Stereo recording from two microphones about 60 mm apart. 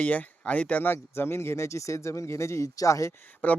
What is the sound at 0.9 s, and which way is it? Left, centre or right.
Speech, left.